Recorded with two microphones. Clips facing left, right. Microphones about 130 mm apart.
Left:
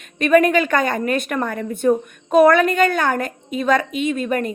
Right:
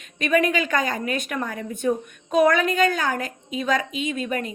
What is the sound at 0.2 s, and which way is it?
Speech, 50° left (ahead or behind).